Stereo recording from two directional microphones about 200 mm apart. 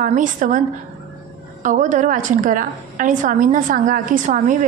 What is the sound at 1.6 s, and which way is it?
A woman's voice, 40° right (ahead or behind).